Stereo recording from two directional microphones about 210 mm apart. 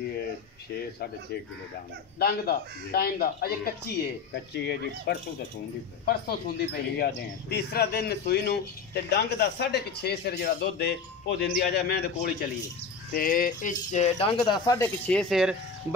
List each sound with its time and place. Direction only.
2.1 s speech: 45° left (ahead or behind); by 14.9 s 20° left (ahead or behind)
15.0 s speech: centre (ahead or behind)